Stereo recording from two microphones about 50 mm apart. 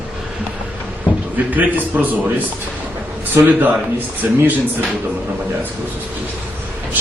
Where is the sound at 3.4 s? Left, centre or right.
Right.